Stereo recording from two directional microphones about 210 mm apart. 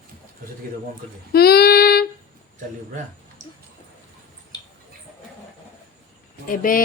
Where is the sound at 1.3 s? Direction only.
50° left (ahead or behind).